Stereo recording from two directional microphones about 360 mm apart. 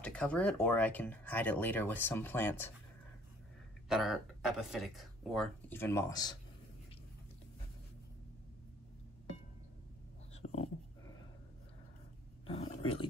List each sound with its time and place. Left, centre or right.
0.0 s speech: centre
3.9 s speech: centre
12.4 s dog: centre